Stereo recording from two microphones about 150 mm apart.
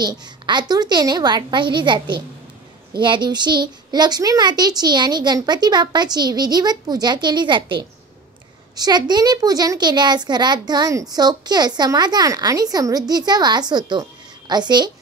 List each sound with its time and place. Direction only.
0.0 s a woman's voice: 30° right (ahead or behind)